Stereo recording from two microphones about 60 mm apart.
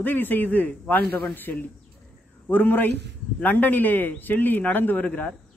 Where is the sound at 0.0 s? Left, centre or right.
Left.